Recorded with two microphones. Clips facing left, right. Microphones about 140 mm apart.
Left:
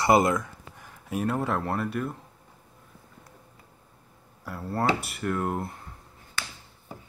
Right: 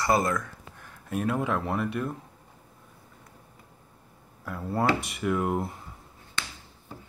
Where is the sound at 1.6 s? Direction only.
Centre (ahead or behind).